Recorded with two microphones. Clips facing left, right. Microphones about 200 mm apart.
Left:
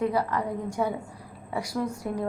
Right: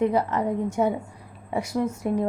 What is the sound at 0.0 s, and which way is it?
A woman's voice, 25° right (ahead or behind).